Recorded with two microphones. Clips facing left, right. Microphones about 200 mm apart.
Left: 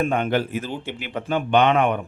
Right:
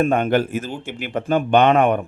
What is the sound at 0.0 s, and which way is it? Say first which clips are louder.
A man's voice: right 4 dB; 45° right (ahead or behind).